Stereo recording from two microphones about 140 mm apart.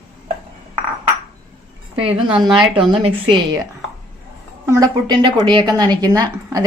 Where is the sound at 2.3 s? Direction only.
5° right (ahead or behind).